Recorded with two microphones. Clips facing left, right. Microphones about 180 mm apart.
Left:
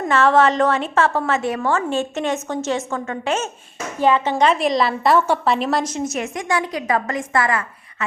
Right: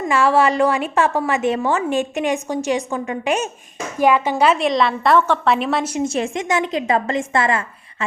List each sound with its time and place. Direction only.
0.1 s a woman's voice: 10° right (ahead or behind)
6.1 s a woman's voice: 30° right (ahead or behind)